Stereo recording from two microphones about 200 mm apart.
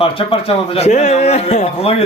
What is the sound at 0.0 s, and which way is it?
A man's voice, 25° left (ahead or behind).